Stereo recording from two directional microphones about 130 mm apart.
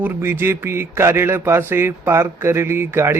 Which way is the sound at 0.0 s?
15° right (ahead or behind).